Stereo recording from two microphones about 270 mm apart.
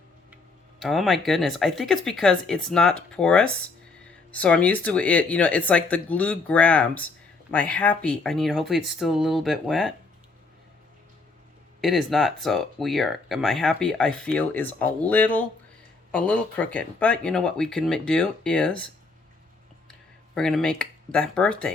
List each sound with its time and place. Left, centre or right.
0.8 s speech: centre
11.8 s speech: centre
19.9 s speech: centre